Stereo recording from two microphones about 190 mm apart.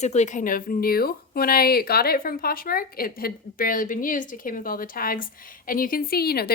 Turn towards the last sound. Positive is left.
turn(degrees=55)  # may be behind; listen again after turning